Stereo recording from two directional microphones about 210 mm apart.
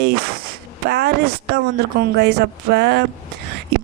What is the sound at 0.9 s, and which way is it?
Speech, 50° right (ahead or behind).